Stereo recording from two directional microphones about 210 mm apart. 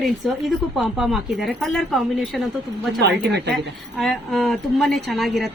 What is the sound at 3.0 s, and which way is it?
Speech, 55° right (ahead or behind).